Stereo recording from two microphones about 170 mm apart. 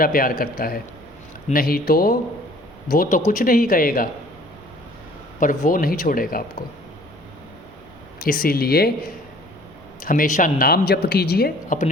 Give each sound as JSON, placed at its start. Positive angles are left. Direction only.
{"t": 0.0, "sound": "speech", "side_deg": 55}
{"t": 5.4, "sound": "speech", "side_deg": 50}
{"t": 8.2, "sound": "speech", "side_deg": 60}
{"t": 10.0, "sound": "speech", "side_deg": 55}